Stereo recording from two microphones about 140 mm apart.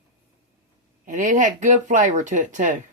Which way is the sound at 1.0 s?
65° right (ahead or behind).